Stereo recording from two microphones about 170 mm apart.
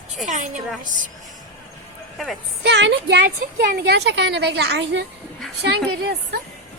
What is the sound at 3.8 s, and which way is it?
A woman's voice, 80° right.